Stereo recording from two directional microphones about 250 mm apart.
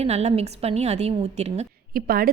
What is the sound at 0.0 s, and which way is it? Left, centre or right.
A woman's voice, right.